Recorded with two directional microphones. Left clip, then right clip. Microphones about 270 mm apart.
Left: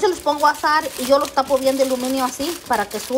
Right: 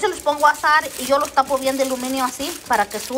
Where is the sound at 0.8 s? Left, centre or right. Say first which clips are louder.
Left 2 dB; centre.